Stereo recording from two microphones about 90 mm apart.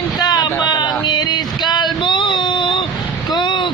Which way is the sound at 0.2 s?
45° left (ahead or behind).